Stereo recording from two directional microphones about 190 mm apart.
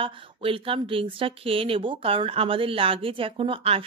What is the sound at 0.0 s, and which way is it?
Speech, 30° right (ahead or behind).